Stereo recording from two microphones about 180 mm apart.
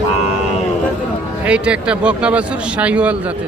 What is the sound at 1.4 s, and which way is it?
Speech, 5° right (ahead or behind).